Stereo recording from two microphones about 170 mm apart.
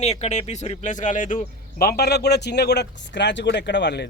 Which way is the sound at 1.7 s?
65° left (ahead or behind).